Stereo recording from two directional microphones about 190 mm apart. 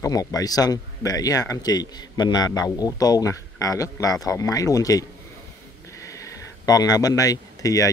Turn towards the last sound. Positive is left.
turn(degrees=15)  # may be behind; listen again after turning